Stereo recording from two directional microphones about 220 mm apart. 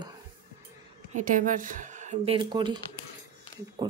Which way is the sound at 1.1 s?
35° right (ahead or behind).